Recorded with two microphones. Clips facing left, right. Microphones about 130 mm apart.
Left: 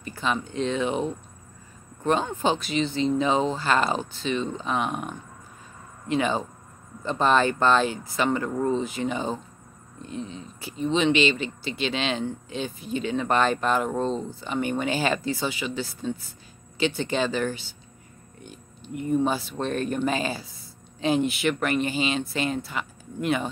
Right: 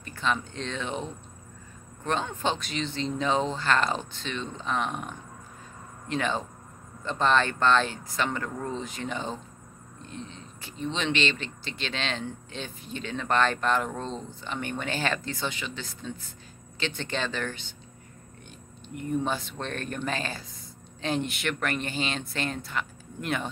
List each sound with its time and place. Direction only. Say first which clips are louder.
0.0 s speech: left 2 dB; 5° left (ahead or behind)
19.0 s speech: left 5 dB; 5° left (ahead or behind)